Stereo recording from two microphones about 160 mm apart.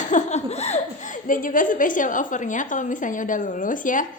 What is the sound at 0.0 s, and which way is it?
A woman's voice, 50° left (ahead or behind).